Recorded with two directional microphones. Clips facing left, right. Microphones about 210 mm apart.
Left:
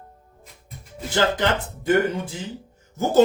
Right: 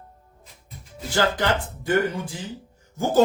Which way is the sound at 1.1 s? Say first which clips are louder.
Left 1 dB; 20° left (ahead or behind).